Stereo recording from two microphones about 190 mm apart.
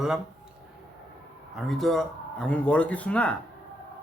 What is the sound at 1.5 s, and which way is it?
Speech, centre (ahead or behind).